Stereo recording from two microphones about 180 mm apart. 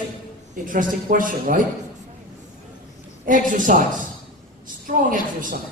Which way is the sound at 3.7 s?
45° right (ahead or behind).